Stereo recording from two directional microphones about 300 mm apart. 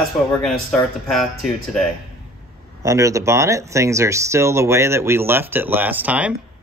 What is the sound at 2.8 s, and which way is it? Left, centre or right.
Speech, centre.